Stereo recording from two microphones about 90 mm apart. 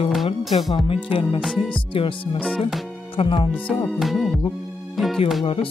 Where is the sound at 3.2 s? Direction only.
70° left (ahead or behind).